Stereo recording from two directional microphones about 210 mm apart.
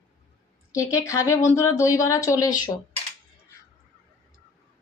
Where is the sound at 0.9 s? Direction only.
15° left (ahead or behind).